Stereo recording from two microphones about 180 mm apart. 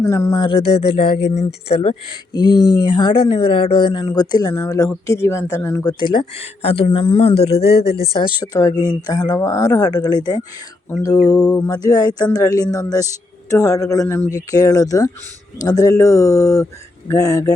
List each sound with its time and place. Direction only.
0.0 s speech: 15° left (ahead or behind)
6.0 s speech: 25° left (ahead or behind)
7.9 s speech: 60° left (ahead or behind)
8.1 s speech: 25° left (ahead or behind)